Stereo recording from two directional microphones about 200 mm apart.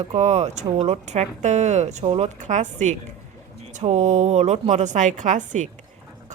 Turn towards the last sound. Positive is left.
turn(degrees=-40)  # may be behind; listen again after turning